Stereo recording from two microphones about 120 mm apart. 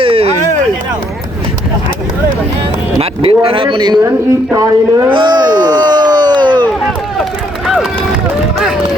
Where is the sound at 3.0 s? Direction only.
50° right (ahead or behind).